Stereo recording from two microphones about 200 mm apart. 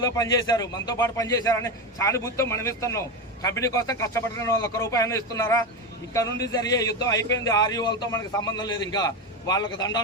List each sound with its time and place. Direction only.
0.0 s a man's voice: 20° left (ahead or behind)